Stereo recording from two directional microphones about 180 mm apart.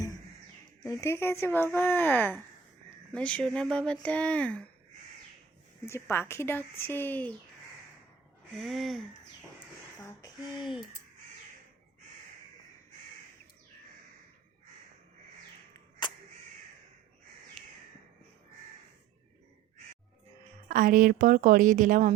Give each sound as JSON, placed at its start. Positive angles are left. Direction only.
{"t": 0.9, "sound": "speech", "side_deg": 15}
{"t": 5.8, "sound": "speech", "side_deg": 15}
{"t": 8.5, "sound": "speech", "side_deg": 0}
{"t": 16.0, "sound": "crow", "side_deg": 25}
{"t": 20.7, "sound": "a woman's voice", "side_deg": -45}